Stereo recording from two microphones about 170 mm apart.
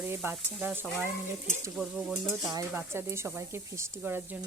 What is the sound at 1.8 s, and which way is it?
Speech, centre (ahead or behind).